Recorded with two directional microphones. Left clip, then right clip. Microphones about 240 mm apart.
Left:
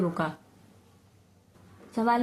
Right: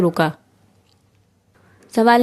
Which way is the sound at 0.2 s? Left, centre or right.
Right.